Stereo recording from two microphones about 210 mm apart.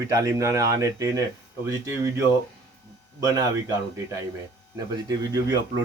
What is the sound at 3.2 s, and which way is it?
Speech, 15° right (ahead or behind).